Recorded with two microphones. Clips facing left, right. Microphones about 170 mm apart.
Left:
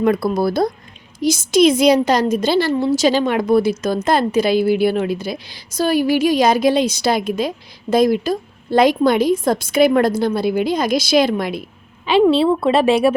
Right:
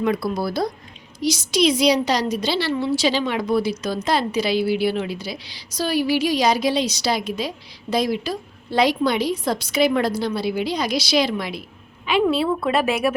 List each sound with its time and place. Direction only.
0.0 s a woman's voice: 50° left (ahead or behind)
12.0 s a woman's voice: 30° left (ahead or behind)